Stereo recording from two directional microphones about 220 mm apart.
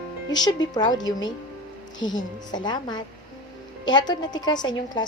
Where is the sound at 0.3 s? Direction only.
20° left (ahead or behind).